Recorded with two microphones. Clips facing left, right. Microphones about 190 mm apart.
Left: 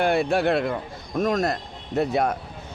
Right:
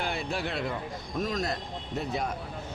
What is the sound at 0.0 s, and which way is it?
A man's voice, 70° left (ahead or behind).